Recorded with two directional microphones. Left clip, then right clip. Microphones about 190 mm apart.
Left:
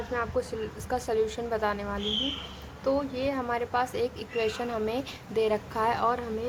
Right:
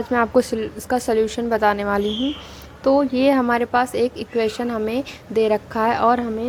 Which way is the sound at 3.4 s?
35° right (ahead or behind).